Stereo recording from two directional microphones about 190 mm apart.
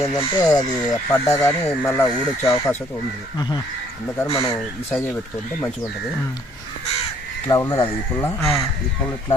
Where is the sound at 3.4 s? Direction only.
20° left (ahead or behind).